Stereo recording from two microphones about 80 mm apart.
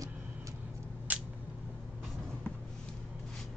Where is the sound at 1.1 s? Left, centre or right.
Centre.